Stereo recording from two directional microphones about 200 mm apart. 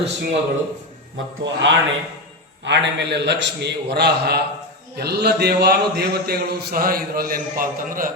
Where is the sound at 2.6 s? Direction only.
60° right (ahead or behind).